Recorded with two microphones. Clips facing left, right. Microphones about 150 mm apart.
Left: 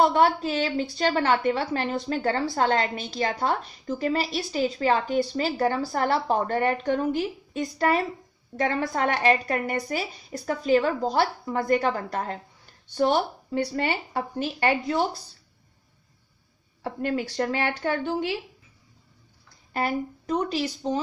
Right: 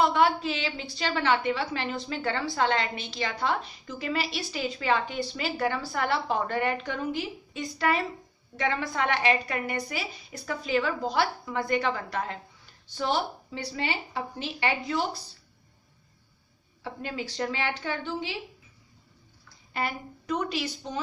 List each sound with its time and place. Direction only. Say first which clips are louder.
0.0 s a woman's voice: left 3 dB; 45° left (ahead or behind)
16.8 s a woman's voice: left 7 dB; 50° left (ahead or behind)
19.7 s speech: left 5 dB; 45° left (ahead or behind)